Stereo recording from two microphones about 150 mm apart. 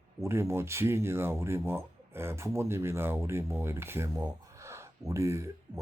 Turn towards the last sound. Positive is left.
turn(degrees=-20)  # may be behind; listen again after turning